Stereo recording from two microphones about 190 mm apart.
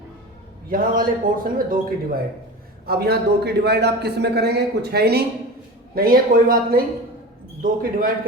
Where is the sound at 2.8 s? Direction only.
55° right (ahead or behind).